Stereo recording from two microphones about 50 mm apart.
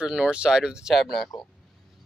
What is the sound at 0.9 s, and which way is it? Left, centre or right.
Speech, centre.